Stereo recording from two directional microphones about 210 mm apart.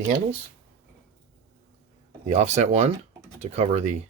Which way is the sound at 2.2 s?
30° right (ahead or behind).